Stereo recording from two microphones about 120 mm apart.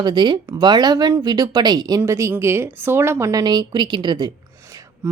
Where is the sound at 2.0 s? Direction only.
25° right (ahead or behind).